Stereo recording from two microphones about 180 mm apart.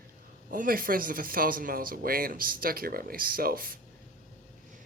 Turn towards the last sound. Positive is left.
turn(degrees=-55)  # may be behind; listen again after turning